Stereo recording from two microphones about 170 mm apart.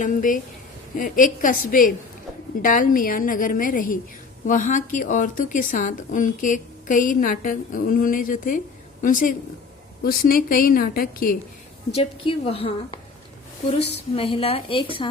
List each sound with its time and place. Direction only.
0.0 s a woman's voice: 50° left (ahead or behind)
10.0 s a woman's voice: 60° left (ahead or behind)
11.9 s a woman's voice: 35° left (ahead or behind)